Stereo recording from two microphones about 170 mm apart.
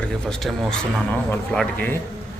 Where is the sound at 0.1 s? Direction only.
Centre (ahead or behind).